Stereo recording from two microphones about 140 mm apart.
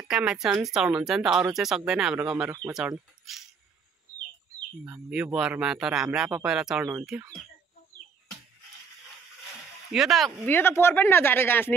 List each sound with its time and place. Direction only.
0.1 s speech: 5° right (ahead or behind)
4.8 s speech: 10° right (ahead or behind)
9.9 s speech: centre (ahead or behind)
10.4 s speech: 15° left (ahead or behind)